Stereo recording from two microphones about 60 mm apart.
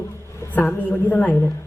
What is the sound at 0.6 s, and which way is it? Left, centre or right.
Speech, left.